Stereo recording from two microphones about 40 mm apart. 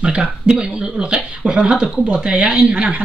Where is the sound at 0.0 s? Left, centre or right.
Right.